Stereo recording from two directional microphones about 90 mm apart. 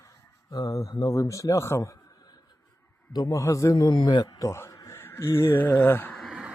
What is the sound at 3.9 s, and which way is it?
Speech, 55° left (ahead or behind).